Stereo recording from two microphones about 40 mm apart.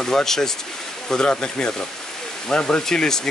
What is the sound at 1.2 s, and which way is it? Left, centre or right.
Speech, left.